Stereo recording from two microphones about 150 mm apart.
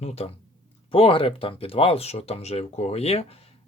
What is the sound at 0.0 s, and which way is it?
Speech, 45° left (ahead or behind).